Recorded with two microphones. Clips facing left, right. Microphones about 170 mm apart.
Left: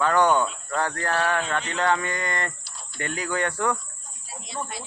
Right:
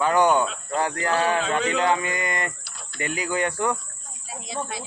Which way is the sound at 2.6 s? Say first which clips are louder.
Right 1 dB; 65° right (ahead or behind).